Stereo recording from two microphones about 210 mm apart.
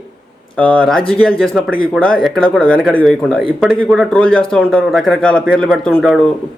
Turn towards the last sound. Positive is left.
turn(degrees=5)  # may be behind; listen again after turning